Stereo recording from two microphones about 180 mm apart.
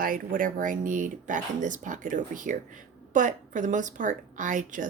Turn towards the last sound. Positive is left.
turn(degrees=-45)  # may be behind; listen again after turning